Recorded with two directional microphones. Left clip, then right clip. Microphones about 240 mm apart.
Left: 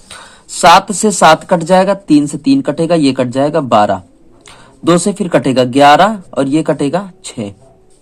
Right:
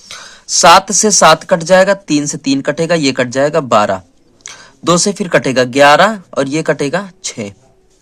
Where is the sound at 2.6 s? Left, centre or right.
Right.